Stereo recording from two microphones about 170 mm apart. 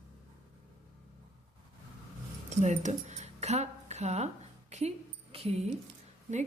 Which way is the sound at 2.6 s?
45° right (ahead or behind).